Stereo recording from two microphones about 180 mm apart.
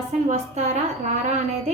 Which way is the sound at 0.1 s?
40° right (ahead or behind).